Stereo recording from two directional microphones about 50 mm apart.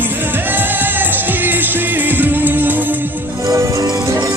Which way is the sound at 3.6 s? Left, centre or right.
Right.